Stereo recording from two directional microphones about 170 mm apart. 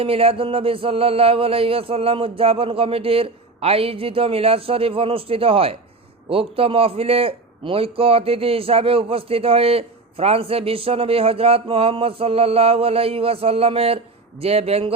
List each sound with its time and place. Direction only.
0.0 s a man's voice: 35° right (ahead or behind)